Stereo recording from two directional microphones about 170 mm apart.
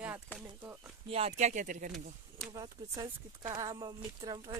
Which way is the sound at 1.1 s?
40° right (ahead or behind).